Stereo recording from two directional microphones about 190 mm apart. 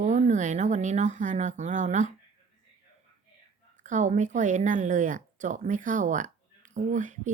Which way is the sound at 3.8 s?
40° right (ahead or behind).